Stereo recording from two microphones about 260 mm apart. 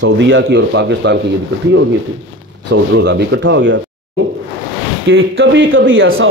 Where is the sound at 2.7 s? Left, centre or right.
Right.